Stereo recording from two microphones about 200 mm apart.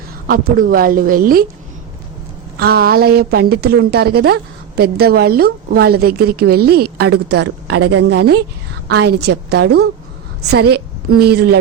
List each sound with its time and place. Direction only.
0.5 s a woman's voice: 45° right (ahead or behind)
2.6 s a woman's voice: 50° right (ahead or behind)
7.8 s a woman's voice: 90° right
8.9 s a woman's voice: 55° right (ahead or behind)